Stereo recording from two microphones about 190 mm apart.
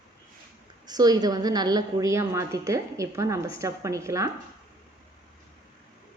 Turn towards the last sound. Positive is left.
turn(degrees=-15)  # may be behind; listen again after turning